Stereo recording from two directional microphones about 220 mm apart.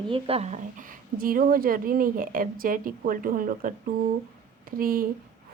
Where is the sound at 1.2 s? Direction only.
40° right (ahead or behind).